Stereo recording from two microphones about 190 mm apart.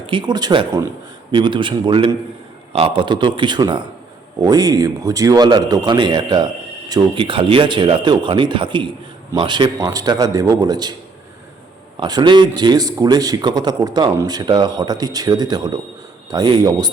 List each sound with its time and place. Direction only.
0.0 s speech: 25° right (ahead or behind)
11.9 s speech: 20° right (ahead or behind)